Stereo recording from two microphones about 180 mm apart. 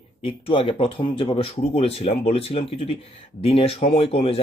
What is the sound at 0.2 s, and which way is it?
Speech, 30° left (ahead or behind).